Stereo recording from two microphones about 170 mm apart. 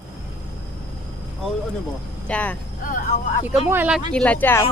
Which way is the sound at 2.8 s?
55° left (ahead or behind).